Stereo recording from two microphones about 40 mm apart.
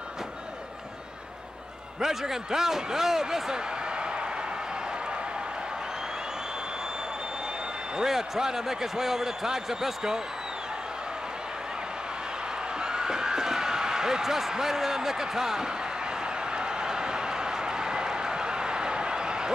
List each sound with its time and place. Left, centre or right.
2.0 s speech: centre
8.0 s speech: centre
12.8 s a sound: centre